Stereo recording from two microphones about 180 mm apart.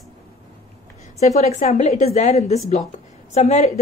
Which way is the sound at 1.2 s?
40° left (ahead or behind).